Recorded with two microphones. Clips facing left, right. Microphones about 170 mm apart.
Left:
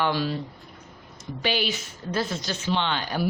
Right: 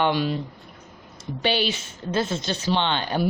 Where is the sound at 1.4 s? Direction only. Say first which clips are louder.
Right 3 dB; 30° right (ahead or behind).